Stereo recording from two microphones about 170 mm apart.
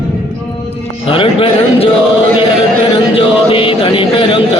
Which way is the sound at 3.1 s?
30° left (ahead or behind).